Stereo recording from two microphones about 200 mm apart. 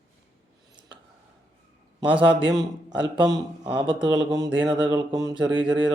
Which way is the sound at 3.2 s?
20° right (ahead or behind).